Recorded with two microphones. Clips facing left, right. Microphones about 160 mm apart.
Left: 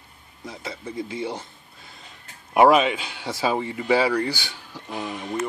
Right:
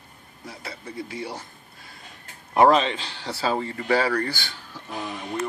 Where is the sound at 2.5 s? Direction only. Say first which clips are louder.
Left 2 dB; 10° left (ahead or behind).